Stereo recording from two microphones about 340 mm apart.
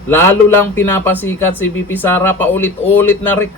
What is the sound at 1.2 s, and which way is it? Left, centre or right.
Speech, left.